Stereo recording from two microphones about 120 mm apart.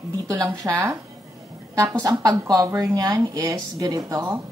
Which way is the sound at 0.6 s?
20° right (ahead or behind).